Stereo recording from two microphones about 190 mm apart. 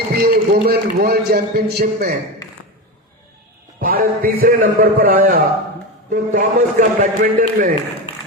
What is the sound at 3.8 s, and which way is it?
A man's voice, 50° right (ahead or behind).